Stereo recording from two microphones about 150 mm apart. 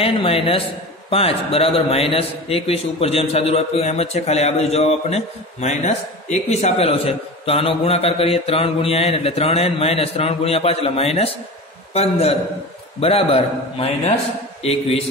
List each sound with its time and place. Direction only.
0.0 s a man's voice: 40° left (ahead or behind)